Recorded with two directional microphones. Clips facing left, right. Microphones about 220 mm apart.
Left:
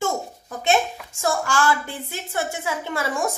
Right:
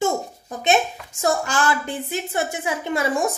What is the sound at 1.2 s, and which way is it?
A woman's voice, 20° right (ahead or behind).